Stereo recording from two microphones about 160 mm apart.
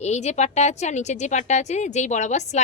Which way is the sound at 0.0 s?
45° left (ahead or behind).